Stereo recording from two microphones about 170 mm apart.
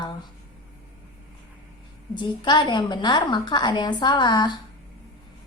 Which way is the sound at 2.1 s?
25° left (ahead or behind).